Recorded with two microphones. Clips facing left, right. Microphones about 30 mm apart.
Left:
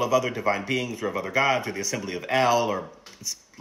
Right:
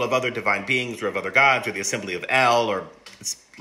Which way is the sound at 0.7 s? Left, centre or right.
Right.